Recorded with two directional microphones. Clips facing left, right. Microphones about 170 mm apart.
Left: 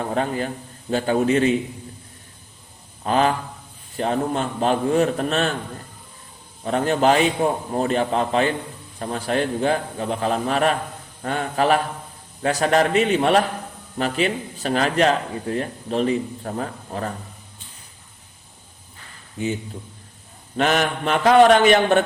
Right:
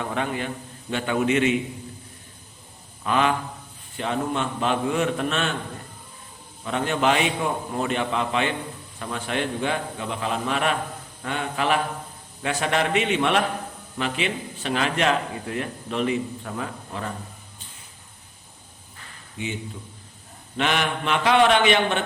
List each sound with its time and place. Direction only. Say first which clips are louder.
0.0 s speech: left 4 dB; 35° left (ahead or behind)
3.0 s speech: left 3 dB; 35° left (ahead or behind)
6.7 s speech: left 4 dB; 40° left (ahead or behind)
19.4 s speech: left 6 dB; 40° left (ahead or behind)
20.6 s speech: left 4 dB; 40° left (ahead or behind)